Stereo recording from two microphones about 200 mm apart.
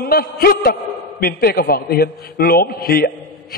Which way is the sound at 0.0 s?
50° left (ahead or behind).